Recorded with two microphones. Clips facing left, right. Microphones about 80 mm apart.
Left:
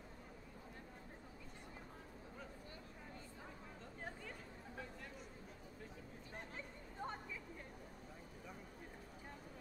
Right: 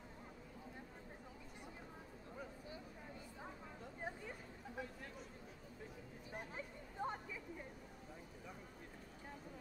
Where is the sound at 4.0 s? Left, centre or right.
Centre.